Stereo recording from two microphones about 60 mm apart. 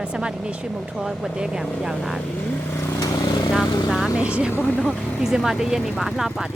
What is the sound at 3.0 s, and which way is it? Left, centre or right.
Vehicle, left.